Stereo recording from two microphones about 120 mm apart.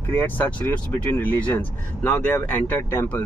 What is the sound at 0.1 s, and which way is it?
Speech, 15° left (ahead or behind).